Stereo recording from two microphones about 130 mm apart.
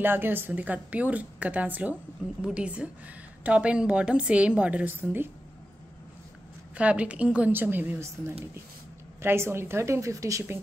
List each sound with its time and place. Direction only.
0.0 s a woman's voice: 15° right (ahead or behind)
6.8 s a woman's voice: 10° right (ahead or behind)